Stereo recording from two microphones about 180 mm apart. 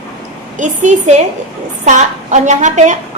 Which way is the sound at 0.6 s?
40° right (ahead or behind).